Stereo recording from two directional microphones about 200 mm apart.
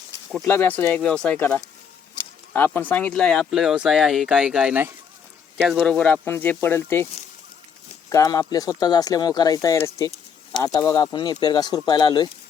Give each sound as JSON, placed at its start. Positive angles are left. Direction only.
{"t": 0.4, "sound": "speech", "side_deg": 10}
{"t": 8.1, "sound": "speech", "side_deg": 15}